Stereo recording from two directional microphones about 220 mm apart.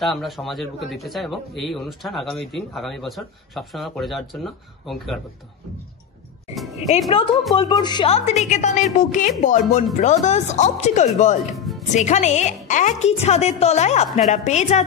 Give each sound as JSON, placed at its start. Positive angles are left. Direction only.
{"t": 0.0, "sound": "speech", "side_deg": 0}
{"t": 7.1, "sound": "a woman's voice", "side_deg": 25}
{"t": 11.5, "sound": "music", "side_deg": 0}
{"t": 11.9, "sound": "a woman's voice", "side_deg": 30}